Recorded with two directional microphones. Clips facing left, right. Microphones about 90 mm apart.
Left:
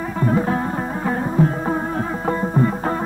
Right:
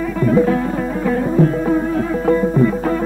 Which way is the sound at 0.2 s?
30° left (ahead or behind).